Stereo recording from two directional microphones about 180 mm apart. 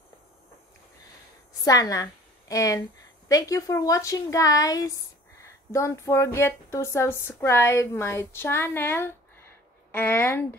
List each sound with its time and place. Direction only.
1.6 s a woman's voice: 20° left (ahead or behind)